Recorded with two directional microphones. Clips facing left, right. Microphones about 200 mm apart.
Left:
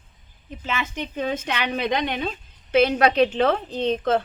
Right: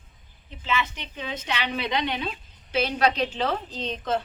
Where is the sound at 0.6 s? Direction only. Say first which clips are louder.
Even; 50° left (ahead or behind).